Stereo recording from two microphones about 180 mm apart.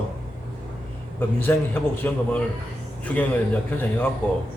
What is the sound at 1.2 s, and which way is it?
A man's voice, 10° left (ahead or behind).